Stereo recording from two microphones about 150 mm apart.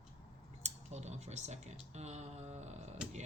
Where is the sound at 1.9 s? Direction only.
50° right (ahead or behind).